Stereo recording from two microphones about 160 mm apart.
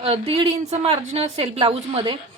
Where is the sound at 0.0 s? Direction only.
35° right (ahead or behind).